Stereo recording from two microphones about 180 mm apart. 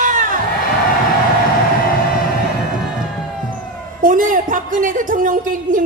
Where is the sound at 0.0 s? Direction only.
45° right (ahead or behind).